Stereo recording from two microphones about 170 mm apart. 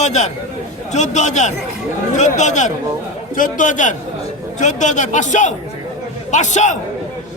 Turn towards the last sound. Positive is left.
turn(degrees=45)  # may be behind; listen again after turning